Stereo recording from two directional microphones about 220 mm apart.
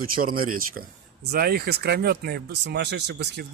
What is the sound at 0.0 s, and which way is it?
Speech, 40° right (ahead or behind).